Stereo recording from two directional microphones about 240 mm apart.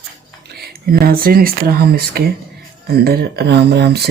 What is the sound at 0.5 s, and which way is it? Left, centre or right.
Speech, right.